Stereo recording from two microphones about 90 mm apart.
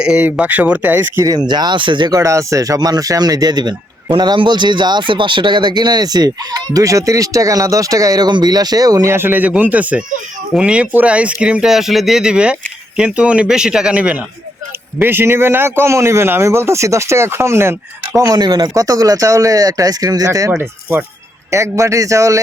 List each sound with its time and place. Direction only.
0.0 s a man's voice: 10° right (ahead or behind)
1.2 s speech: 50° right (ahead or behind)
2.0 s speech: 35° right (ahead or behind)
9.1 s speech: 20° right (ahead or behind)
15.0 s a man's voice: 25° right (ahead or behind)
18.2 s speech: 45° right (ahead or behind)
20.5 s a man's voice: 20° right (ahead or behind)
21.5 s speech: 35° right (ahead or behind)